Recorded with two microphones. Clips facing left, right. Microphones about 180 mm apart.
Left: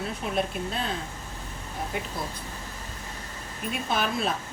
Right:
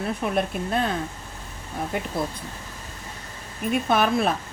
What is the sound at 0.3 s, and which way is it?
Speech, 55° right (ahead or behind).